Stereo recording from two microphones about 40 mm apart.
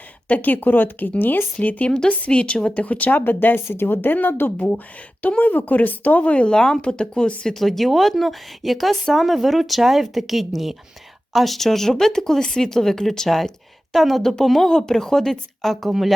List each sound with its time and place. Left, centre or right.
0.3 s speech: left
1.5 s a woman's voice: left
2.8 s speech: left
3.2 s speech: left
6.5 s a woman's voice: left
7.5 s speech: centre